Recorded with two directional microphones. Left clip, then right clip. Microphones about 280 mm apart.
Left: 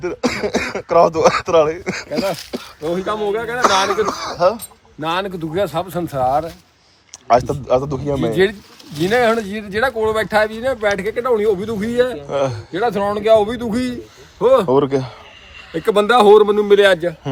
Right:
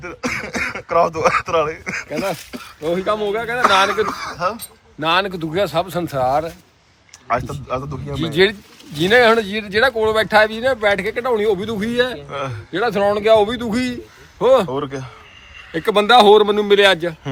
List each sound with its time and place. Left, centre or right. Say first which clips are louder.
0.0 s speech: left 4 dB; centre
8.2 s speech: right 2 dB; centre
12.3 s speech: left 7 dB; centre
12.7 s speech: right 4 dB; centre
14.8 s speech: left 9 dB; left
15.7 s speech: right 1 dB; centre